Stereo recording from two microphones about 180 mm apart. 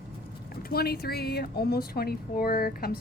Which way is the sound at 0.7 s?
60° left (ahead or behind).